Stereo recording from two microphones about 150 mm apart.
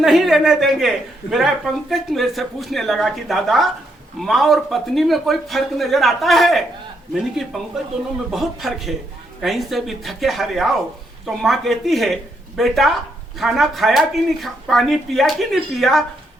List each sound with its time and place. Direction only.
0.0 s speech: centre (ahead or behind)